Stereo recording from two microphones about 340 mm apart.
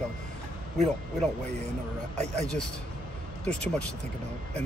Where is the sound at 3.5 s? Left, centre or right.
Centre.